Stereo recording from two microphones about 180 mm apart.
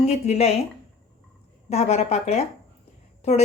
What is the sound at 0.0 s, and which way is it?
Speech, 35° left (ahead or behind).